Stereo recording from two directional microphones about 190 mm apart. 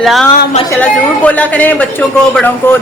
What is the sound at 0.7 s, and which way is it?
A man's voice, 10° left (ahead or behind).